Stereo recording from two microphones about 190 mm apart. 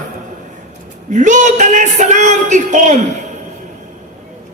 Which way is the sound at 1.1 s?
40° right (ahead or behind).